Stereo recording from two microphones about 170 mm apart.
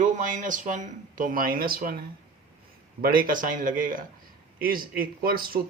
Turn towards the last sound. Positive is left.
turn(degrees=-60)  # may be behind; listen again after turning